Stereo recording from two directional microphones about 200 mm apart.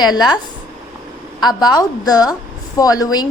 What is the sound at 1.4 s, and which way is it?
A woman's voice, 20° left (ahead or behind).